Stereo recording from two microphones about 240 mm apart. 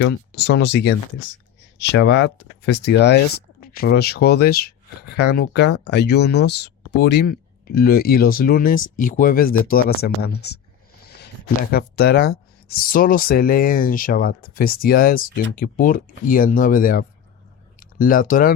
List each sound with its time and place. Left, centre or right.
0.0 s speech: left
11.0 s a sound: left
11.7 s speech: left